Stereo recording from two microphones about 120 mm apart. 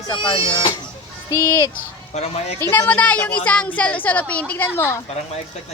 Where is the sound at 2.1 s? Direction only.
65° left (ahead or behind).